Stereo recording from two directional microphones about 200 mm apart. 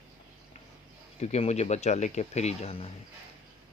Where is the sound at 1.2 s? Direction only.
30° left (ahead or behind).